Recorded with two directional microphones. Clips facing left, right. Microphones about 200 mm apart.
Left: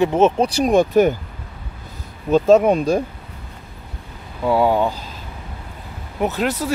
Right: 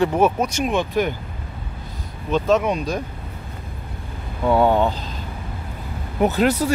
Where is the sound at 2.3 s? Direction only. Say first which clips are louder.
Left 6 dB; 40° left (ahead or behind).